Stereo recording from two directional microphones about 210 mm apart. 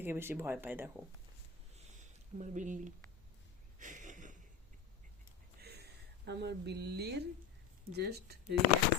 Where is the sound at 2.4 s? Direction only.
35° right (ahead or behind).